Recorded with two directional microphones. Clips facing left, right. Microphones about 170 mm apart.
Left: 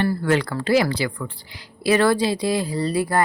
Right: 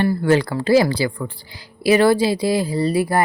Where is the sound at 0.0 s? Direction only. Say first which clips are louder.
Right 4 dB; 30° right (ahead or behind).